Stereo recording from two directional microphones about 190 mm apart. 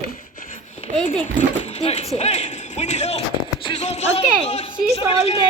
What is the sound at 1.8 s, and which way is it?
A woman's voice, 35° left (ahead or behind).